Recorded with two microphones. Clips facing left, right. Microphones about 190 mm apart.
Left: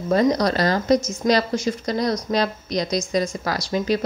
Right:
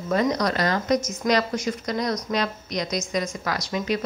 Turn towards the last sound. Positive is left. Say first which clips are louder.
# left 4 dB
turn(degrees=35)  # may be behind; listen again after turning